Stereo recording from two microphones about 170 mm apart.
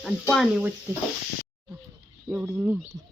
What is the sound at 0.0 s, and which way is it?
Speech, centre (ahead or behind).